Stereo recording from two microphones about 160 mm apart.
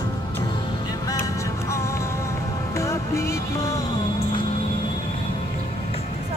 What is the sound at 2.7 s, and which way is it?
Music, 20° left (ahead or behind).